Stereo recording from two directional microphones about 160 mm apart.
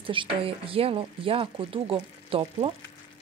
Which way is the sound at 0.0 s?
35° right (ahead or behind).